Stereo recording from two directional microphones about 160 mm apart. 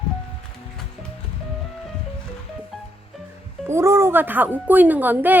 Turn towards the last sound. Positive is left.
turn(degrees=-10)  # may be behind; listen again after turning